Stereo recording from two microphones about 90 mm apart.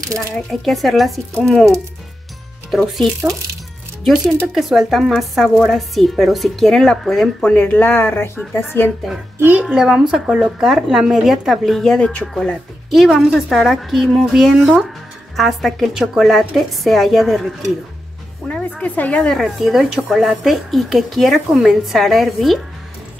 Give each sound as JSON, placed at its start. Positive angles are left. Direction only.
{"t": 0.5, "sound": "a woman's voice", "side_deg": 0}
{"t": 7.5, "sound": "speech", "side_deg": 20}
{"t": 9.4, "sound": "a woman's voice", "side_deg": -20}
{"t": 9.7, "sound": "a woman's voice", "side_deg": -10}
{"t": 12.4, "sound": "a woman's voice", "side_deg": 0}